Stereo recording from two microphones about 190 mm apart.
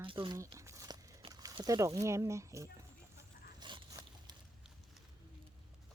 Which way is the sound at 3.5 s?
25° right (ahead or behind).